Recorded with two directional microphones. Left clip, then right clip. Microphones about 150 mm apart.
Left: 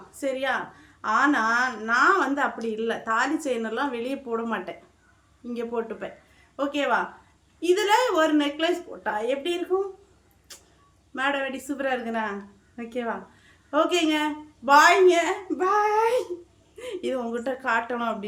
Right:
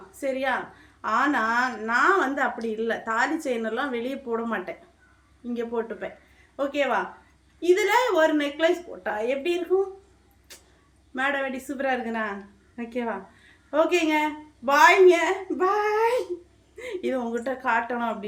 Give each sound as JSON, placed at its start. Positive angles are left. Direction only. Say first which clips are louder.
{"t": 0.2, "sound": "a woman's voice", "louder": "even", "side_deg": 20}
{"t": 10.5, "sound": "vehicle", "louder": "left 1 dB", "side_deg": 15}
{"t": 11.1, "sound": "a woman's voice", "louder": "even", "side_deg": 15}